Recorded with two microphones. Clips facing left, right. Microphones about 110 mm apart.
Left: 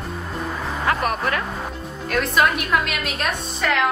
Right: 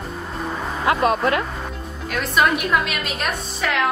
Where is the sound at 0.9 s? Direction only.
25° right (ahead or behind).